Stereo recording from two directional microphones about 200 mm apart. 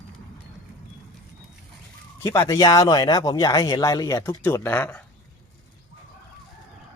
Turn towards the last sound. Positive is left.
turn(degrees=10)  # may be behind; listen again after turning